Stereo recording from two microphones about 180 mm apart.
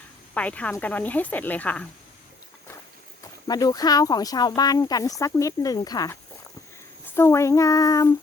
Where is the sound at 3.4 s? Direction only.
20° left (ahead or behind).